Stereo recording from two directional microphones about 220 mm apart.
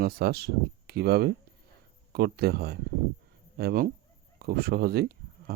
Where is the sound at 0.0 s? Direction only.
45° right (ahead or behind).